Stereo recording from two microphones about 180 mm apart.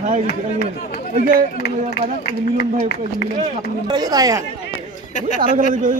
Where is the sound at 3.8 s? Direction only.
20° right (ahead or behind).